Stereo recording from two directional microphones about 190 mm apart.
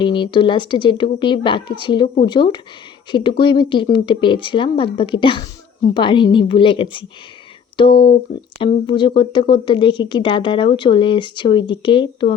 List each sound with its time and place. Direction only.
0.0 s speech: 25° left (ahead or behind)